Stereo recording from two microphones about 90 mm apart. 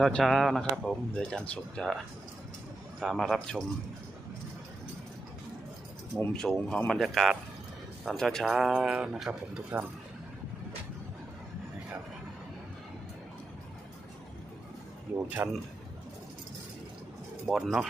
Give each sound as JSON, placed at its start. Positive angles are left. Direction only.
{"t": 0.1, "sound": "speech", "side_deg": 5}
{"t": 3.0, "sound": "speech", "side_deg": 0}
{"t": 6.3, "sound": "speech", "side_deg": 5}
{"t": 15.1, "sound": "speech", "side_deg": -25}
{"t": 17.4, "sound": "speech", "side_deg": -5}